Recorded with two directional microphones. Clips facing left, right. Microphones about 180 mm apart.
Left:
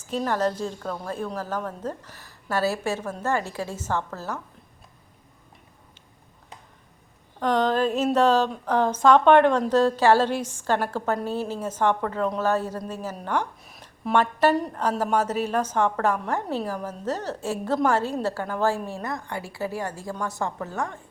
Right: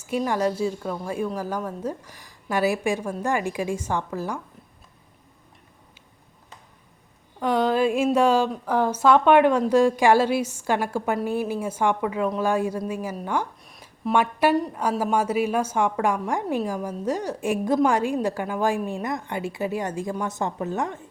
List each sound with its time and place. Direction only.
0.0 s speech: 10° right (ahead or behind)
7.3 s a woman's voice: 10° right (ahead or behind)